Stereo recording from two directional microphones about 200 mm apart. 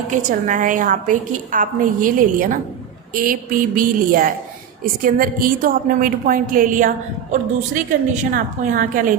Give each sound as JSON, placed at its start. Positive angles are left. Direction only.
{"t": 0.1, "sound": "a woman's voice", "side_deg": -40}